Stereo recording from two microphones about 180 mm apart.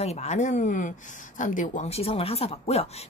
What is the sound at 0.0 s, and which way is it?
Speech, 35° left (ahead or behind).